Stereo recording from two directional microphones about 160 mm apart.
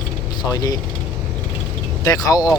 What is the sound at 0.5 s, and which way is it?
Speech, 20° left (ahead or behind).